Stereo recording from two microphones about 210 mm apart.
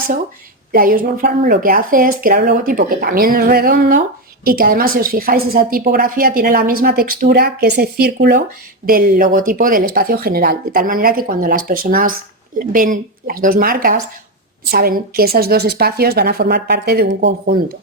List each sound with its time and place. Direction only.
0.7 s a woman's voice: 40° right (ahead or behind)